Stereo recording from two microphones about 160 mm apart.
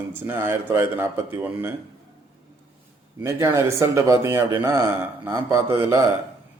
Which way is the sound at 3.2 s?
15° right (ahead or behind).